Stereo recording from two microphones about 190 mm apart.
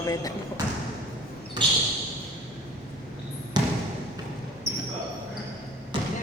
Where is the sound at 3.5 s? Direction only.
20° right (ahead or behind).